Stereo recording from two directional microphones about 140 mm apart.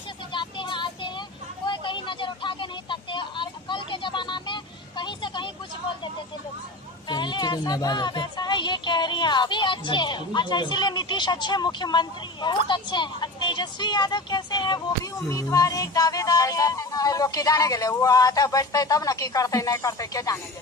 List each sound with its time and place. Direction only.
0.3 s child singing: 35° left (ahead or behind)
1.6 s a sound: 35° left (ahead or behind)
7.1 s speech: 35° left (ahead or behind)